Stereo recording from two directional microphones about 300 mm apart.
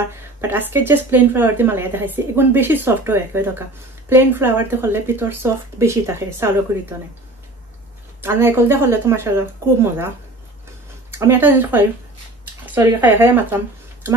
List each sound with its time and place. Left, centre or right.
0.4 s a woman's voice: centre
8.2 s a woman's voice: centre